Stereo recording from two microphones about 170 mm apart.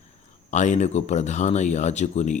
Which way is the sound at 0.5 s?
45° left (ahead or behind).